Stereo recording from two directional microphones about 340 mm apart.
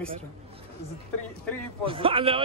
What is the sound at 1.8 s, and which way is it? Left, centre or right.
Speech, centre.